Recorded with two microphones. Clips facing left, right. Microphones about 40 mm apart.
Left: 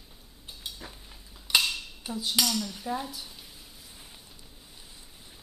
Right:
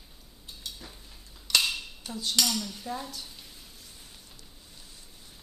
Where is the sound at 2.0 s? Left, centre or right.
Centre.